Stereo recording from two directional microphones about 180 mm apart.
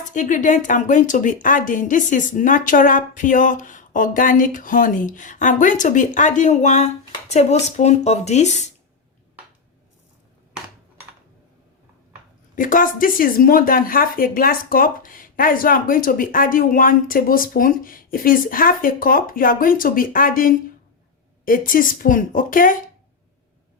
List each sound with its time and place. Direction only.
0.1 s speech: 45° left (ahead or behind)
12.5 s speech: 50° left (ahead or behind)